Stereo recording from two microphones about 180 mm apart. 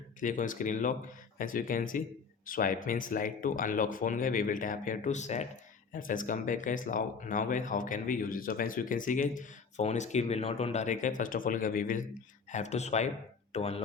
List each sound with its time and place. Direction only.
0.2 s speech: 45° left (ahead or behind)